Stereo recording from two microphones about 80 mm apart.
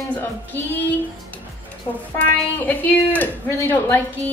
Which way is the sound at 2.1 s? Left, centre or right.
Left.